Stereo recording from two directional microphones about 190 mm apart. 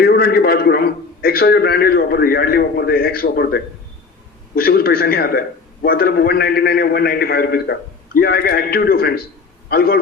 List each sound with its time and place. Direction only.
0.0 s a man's voice: 55° left (ahead or behind)